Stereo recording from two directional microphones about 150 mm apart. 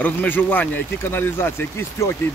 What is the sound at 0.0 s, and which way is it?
Speech, 10° left (ahead or behind).